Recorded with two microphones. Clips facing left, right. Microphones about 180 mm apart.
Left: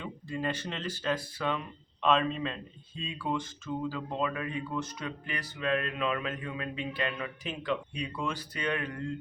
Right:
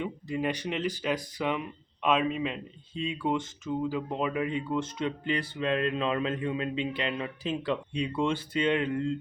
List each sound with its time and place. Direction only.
0.0 s speech: 15° right (ahead or behind)